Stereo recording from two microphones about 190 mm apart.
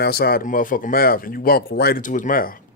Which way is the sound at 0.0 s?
55° left (ahead or behind).